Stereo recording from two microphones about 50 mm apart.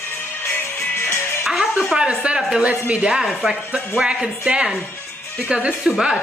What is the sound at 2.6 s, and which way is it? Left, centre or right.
Speech, right.